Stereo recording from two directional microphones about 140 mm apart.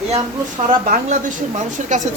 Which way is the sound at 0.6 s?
70° right (ahead or behind).